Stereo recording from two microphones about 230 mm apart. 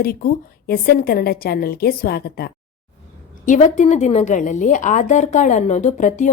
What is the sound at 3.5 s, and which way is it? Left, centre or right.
A woman's voice, left.